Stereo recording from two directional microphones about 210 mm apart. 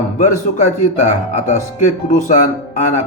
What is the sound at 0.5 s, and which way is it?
Speech, 35° left (ahead or behind).